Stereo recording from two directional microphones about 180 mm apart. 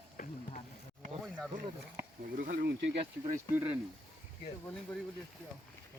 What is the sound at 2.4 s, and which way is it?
Speech, 55° right (ahead or behind).